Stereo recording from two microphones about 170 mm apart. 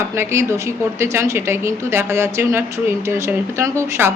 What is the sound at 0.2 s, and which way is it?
A woman's voice, 15° right (ahead or behind).